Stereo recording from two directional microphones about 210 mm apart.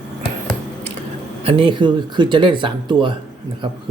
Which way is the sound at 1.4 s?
25° right (ahead or behind).